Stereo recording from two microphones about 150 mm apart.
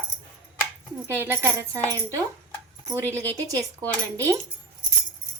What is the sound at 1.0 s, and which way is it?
A woman's voice, 15° right (ahead or behind).